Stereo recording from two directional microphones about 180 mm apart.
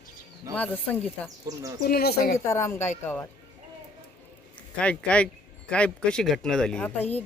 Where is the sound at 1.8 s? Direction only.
60° left (ahead or behind).